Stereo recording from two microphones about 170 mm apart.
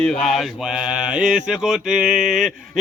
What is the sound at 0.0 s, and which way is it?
Speech, 5° left (ahead or behind).